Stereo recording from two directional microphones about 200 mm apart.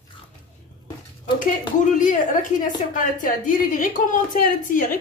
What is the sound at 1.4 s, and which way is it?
Speech, 40° left (ahead or behind).